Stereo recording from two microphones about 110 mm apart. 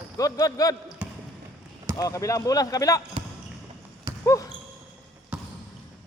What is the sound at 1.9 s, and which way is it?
Speech, 30° left (ahead or behind).